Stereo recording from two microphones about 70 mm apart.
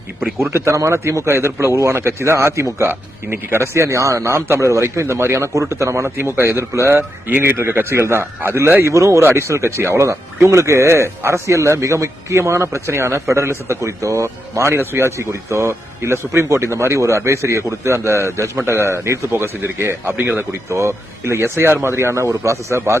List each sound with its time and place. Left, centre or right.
0.5 s speech: right
20.7 s speech: right